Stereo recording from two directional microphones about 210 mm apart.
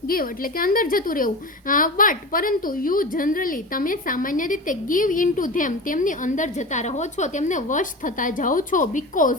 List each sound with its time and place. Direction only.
0.1 s a woman's voice: 45° left (ahead or behind)